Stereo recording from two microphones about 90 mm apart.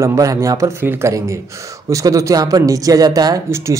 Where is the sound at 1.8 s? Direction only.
40° right (ahead or behind).